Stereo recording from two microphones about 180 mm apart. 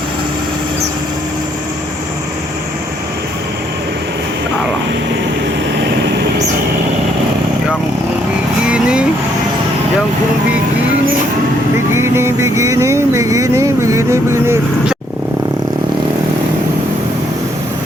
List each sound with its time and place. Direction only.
8.6 s vehicle: 5° right (ahead or behind)
11.9 s music: 15° right (ahead or behind)